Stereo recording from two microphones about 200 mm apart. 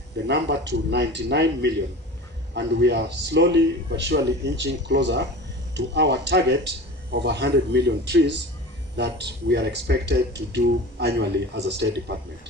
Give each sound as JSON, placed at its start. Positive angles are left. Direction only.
{"t": 0.3, "sound": "speech", "side_deg": -60}